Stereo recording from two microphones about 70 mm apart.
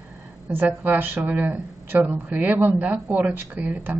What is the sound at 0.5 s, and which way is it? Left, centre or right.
Speech, right.